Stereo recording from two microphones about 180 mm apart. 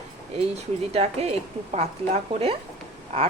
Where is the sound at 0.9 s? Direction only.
35° right (ahead or behind).